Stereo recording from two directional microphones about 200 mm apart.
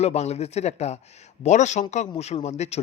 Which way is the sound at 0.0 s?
35° left (ahead or behind).